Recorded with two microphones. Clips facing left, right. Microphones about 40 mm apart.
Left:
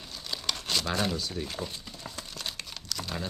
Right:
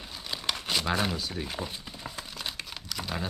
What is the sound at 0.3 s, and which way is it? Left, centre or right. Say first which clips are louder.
Crumpling: right 1 dB; centre.